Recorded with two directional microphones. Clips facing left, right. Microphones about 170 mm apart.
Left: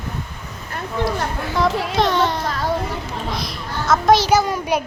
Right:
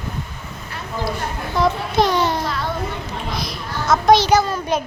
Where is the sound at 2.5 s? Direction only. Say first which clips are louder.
Left 1 dB; 40° left (ahead or behind).